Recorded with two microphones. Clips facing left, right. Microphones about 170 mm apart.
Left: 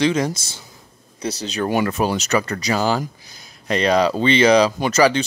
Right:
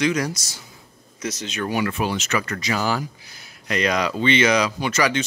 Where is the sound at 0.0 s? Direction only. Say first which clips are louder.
Left 3 dB; 25° left (ahead or behind).